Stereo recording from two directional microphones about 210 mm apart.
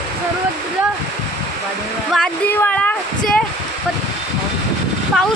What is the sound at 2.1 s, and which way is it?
Speech, 5° left (ahead or behind).